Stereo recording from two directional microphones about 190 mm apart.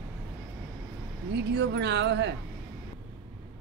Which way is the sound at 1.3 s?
65° right (ahead or behind).